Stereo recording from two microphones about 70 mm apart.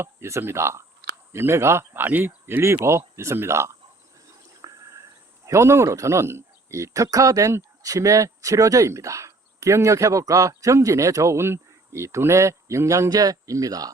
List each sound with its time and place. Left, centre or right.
0.0 s speech: right
4.6 s a sound: right
5.5 s speech: right
13.1 s speech: right